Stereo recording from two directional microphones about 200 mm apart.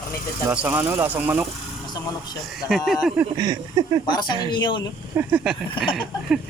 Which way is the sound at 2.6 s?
Centre (ahead or behind).